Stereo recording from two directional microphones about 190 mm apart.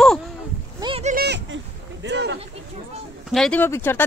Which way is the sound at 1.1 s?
55° right (ahead or behind).